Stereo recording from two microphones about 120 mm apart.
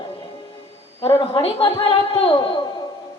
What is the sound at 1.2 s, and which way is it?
A woman's voice, 45° left (ahead or behind).